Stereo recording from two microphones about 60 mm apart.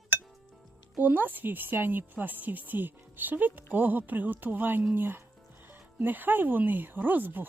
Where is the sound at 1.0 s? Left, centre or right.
Right.